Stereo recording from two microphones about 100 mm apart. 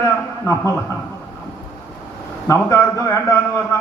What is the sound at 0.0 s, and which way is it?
Speech, 30° left (ahead or behind).